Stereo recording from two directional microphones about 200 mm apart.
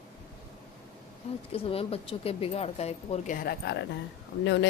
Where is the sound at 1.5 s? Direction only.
30° left (ahead or behind).